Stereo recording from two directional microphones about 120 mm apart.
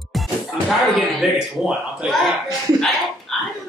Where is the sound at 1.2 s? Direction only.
Centre (ahead or behind).